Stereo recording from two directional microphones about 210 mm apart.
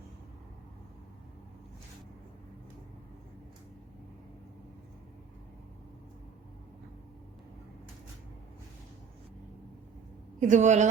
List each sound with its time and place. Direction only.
10.4 s a woman's voice: 35° right (ahead or behind)